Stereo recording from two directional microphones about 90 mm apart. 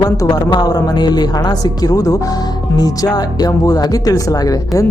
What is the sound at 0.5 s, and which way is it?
Speech, 50° left (ahead or behind).